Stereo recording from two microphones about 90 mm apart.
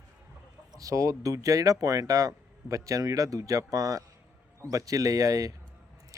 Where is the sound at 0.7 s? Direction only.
40° right (ahead or behind).